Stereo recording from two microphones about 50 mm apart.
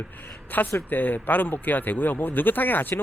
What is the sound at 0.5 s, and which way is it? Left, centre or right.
Speech, left.